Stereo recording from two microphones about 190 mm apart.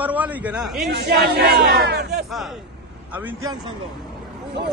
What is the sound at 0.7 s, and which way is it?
Speech, 60° right (ahead or behind).